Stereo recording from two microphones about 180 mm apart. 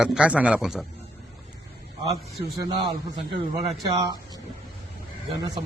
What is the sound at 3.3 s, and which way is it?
Speech, 25° right (ahead or behind).